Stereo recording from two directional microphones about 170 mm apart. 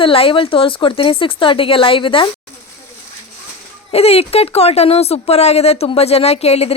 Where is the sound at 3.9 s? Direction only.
35° left (ahead or behind).